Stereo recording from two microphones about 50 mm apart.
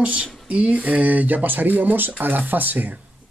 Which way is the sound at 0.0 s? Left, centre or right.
Right.